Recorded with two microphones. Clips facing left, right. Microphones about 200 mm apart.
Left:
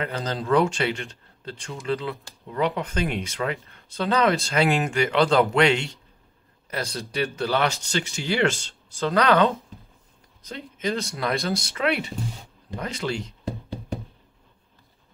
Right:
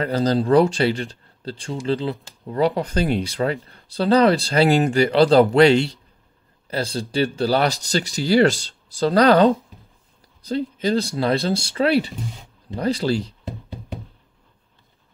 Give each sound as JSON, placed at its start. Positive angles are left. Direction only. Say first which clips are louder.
{"t": 0.0, "sound": "speech", "louder": "right 9 dB", "side_deg": -35}